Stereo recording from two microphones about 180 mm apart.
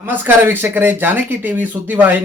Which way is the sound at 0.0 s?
10° right (ahead or behind).